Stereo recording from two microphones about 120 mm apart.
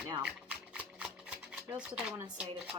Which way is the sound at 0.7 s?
10° right (ahead or behind).